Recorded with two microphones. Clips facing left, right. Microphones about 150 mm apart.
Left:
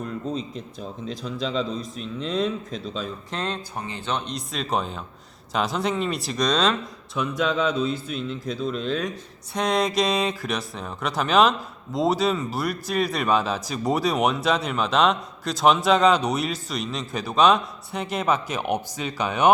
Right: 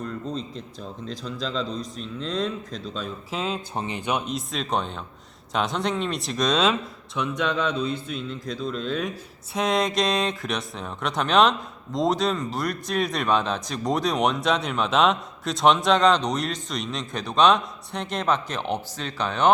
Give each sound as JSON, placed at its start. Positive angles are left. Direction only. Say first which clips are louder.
{"t": 0.0, "sound": "a man's voice", "louder": "left 2 dB", "side_deg": 5}
{"t": 3.8, "sound": "speech", "louder": "right 4 dB", "side_deg": -20}
{"t": 4.4, "sound": "a man's voice", "louder": "even", "side_deg": 0}